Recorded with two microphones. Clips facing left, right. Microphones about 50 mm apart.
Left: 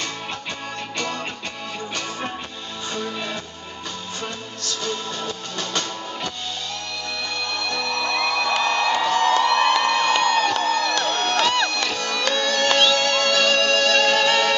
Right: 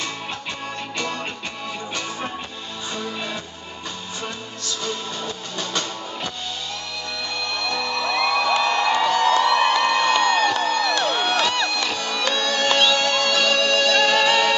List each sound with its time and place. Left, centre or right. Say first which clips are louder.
0.9 s music: even; centre
3.0 s music: left 1 dB; centre
4.8 s music: left 1 dB; centre
7.7 s music: right 1 dB; centre